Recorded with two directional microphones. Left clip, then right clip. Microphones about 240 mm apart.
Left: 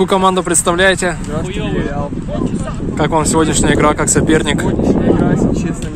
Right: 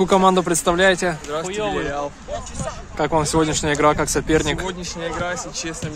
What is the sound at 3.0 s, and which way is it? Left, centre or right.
Speech, centre.